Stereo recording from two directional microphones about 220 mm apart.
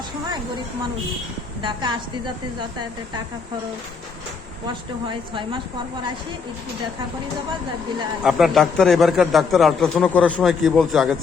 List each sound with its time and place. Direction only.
1.6 s a woman's voice: 20° right (ahead or behind)
5.3 s a woman's voice: 20° right (ahead or behind)
8.2 s a man's voice: centre (ahead or behind)